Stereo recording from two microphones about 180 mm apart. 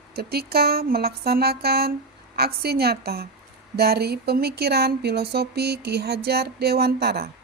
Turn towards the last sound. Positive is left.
turn(degrees=-65)  # may be behind; listen again after turning